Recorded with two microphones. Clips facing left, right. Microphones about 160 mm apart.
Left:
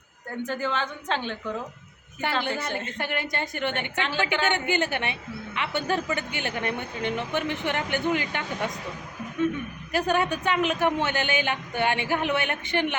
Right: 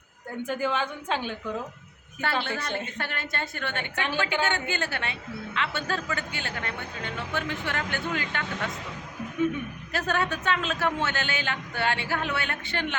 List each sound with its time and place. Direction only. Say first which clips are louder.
0.4 s a woman's voice: right 1 dB; 10° right (ahead or behind)
2.4 s a man's voice: left 2 dB; 10° left (ahead or behind)
3.9 s a woman's voice: left 1 dB; 15° right (ahead or behind)
4.2 s a man's voice: left 2 dB; 15° left (ahead or behind)
9.9 s a man's voice: left 4 dB; 15° left (ahead or behind)